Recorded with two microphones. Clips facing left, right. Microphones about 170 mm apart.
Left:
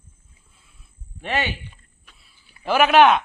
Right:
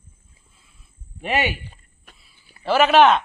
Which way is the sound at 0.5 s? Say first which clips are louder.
Even; centre (ahead or behind).